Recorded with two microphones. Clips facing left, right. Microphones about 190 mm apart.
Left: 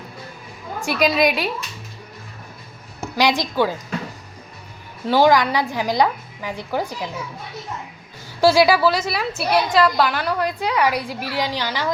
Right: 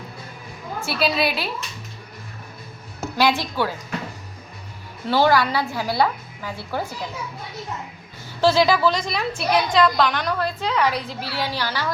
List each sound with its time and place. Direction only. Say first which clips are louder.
0.9 s a woman's voice: left 4 dB; 15° left (ahead or behind)
3.2 s a woman's voice: left 2 dB; 15° left (ahead or behind)
5.0 s a woman's voice: left 3 dB; 15° left (ahead or behind)
8.4 s a woman's voice: left 3 dB; 10° left (ahead or behind)